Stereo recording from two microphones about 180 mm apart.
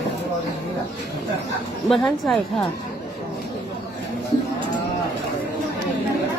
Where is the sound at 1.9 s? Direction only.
Centre (ahead or behind).